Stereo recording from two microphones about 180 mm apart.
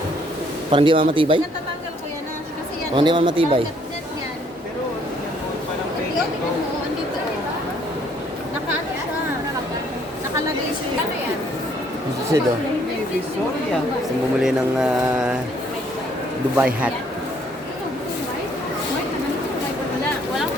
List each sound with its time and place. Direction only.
0.7 s speech: 30° right (ahead or behind)
2.9 s speech: 25° right (ahead or behind)
12.3 s a man's voice: 15° right (ahead or behind)
14.4 s mantra: 5° right (ahead or behind)
16.6 s a man's voice: 5° right (ahead or behind)